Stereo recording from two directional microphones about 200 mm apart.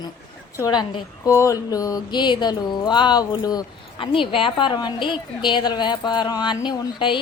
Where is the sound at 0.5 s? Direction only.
20° left (ahead or behind).